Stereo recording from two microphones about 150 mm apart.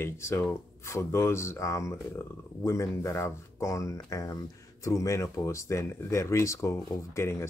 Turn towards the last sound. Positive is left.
turn(degrees=20)  # may be behind; listen again after turning